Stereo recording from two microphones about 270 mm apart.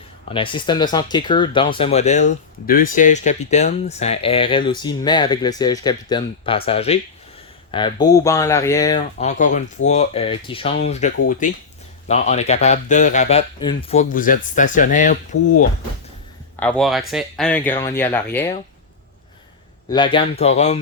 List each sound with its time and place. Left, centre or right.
0.3 s speech: centre
9.1 s speech: left
16.6 s speech: centre
19.9 s speech: centre